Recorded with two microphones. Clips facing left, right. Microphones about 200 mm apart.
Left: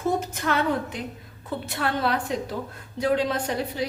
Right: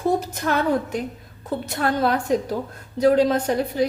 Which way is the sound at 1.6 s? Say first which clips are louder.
Right 4 dB; 40° right (ahead or behind).